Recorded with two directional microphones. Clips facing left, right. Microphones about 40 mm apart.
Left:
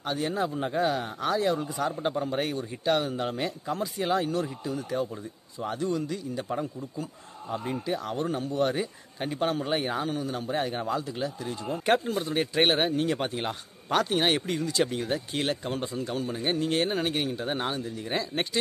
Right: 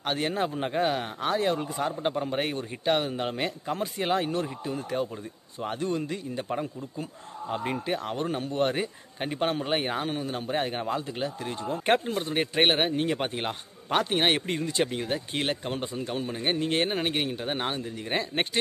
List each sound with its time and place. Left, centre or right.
0.0 s speech: right
1.9 s speech: right
3.7 s speech: right
8.0 s speech: right